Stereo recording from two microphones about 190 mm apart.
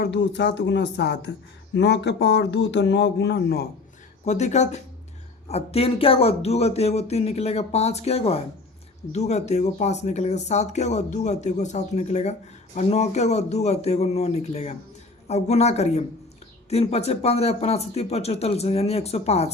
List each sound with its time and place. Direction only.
0.0 s speech: 65° left (ahead or behind)
4.3 s speech: 40° left (ahead or behind)